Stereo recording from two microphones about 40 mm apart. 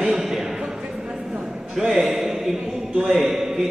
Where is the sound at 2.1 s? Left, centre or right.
Centre.